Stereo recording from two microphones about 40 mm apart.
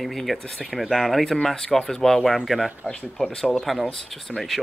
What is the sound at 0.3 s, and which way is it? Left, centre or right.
Speech, centre.